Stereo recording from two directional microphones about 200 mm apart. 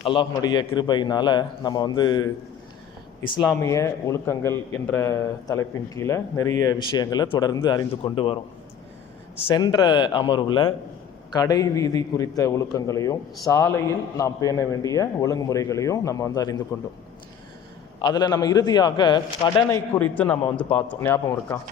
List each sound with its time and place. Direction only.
0.0 s a man's voice: 20° left (ahead or behind)
3.5 s a man's voice: 15° left (ahead or behind)
9.5 s a man's voice: 20° left (ahead or behind)
18.0 s a man's voice: 20° left (ahead or behind)
19.9 s a man's voice: 10° left (ahead or behind)